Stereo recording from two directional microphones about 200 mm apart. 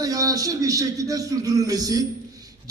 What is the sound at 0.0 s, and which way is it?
A man's voice, 15° right (ahead or behind).